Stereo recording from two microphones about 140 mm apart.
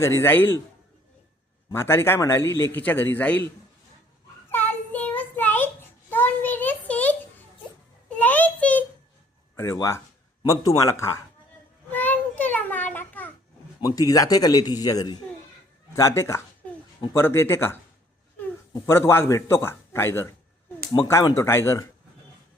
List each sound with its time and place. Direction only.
0.0 s a man's voice: 20° left (ahead or behind)
1.7 s a man's voice: 15° left (ahead or behind)
4.5 s child singing: 15° left (ahead or behind)
8.1 s a sound: 10° left (ahead or behind)
9.6 s a man's voice: 20° left (ahead or behind)
11.9 s a sound: 15° left (ahead or behind)
13.8 s a man's voice: 25° left (ahead or behind)